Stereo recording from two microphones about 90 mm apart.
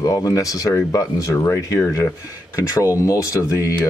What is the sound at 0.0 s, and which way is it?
Speech, 40° left (ahead or behind).